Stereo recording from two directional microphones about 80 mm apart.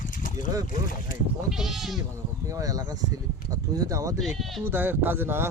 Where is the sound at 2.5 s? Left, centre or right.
Right.